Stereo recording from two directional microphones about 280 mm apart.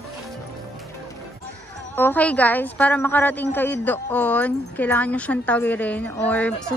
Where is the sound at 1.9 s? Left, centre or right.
Centre.